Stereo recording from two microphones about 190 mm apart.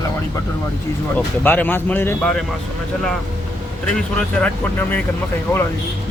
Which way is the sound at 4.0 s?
10° left (ahead or behind).